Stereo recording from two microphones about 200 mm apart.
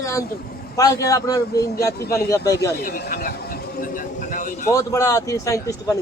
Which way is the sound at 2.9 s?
50° left (ahead or behind).